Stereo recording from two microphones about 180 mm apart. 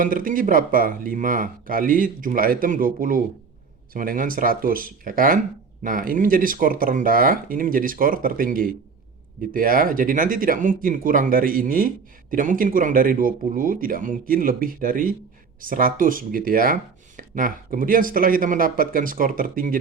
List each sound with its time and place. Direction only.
0.0 s speech: 50° right (ahead or behind)